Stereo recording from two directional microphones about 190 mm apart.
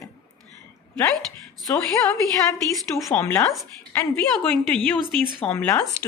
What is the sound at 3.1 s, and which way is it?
Speech, 15° left (ahead or behind).